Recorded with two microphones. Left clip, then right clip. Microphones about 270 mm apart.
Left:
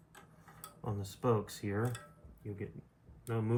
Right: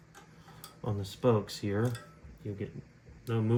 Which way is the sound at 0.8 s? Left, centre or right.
Right.